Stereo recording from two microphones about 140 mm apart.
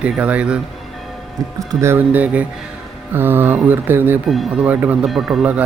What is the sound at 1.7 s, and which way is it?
Speech, 20° right (ahead or behind).